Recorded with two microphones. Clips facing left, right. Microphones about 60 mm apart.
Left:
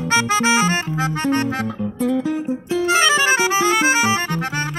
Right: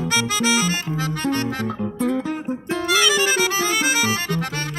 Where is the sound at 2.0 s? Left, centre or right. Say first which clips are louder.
Left 4 dB; centre.